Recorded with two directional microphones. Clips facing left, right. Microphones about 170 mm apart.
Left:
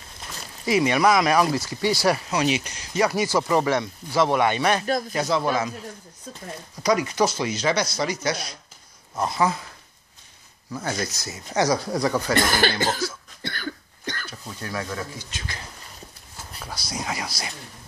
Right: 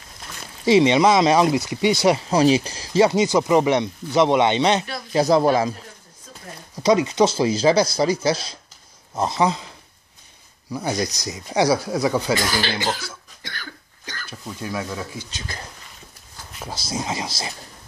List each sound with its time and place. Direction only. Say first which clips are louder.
0.7 s speech: right 5 dB; 25° right (ahead or behind)
2.2 s speech: right 7 dB; 35° right (ahead or behind)
5.1 s speech: right 11 dB; 40° right (ahead or behind)
6.8 s speech: right 4 dB; 25° right (ahead or behind)
10.7 s speech: right 4 dB; 15° right (ahead or behind)
12.4 s speech: left 2 dB; 55° left (ahead or behind)
14.4 s speech: right 4 dB; 15° right (ahead or behind)
16.6 s speech: right 4 dB; 25° right (ahead or behind)